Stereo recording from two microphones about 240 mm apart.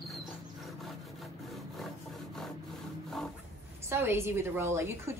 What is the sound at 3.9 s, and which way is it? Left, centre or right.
A woman's voice, centre.